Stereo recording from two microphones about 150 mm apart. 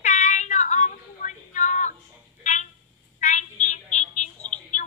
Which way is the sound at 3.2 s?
50° left (ahead or behind).